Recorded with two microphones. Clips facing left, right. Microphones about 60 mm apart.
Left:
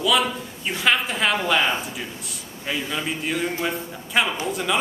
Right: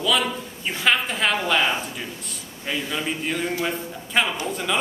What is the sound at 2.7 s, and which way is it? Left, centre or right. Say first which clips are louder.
A man's voice: even; centre.